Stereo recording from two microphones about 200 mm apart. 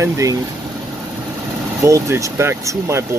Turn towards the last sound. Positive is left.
turn(degrees=-15)  # may be behind; listen again after turning